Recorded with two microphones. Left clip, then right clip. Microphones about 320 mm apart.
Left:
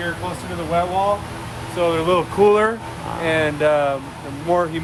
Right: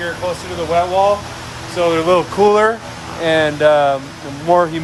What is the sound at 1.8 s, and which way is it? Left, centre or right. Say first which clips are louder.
Speech: right 4 dB; right.